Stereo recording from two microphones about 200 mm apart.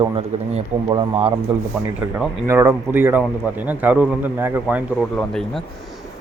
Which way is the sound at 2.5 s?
10° right (ahead or behind).